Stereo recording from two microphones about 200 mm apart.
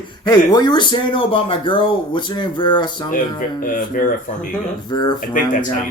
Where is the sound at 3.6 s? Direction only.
45° left (ahead or behind).